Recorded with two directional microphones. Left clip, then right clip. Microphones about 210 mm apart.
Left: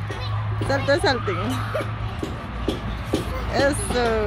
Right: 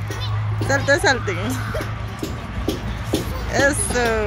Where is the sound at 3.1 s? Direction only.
45° right (ahead or behind).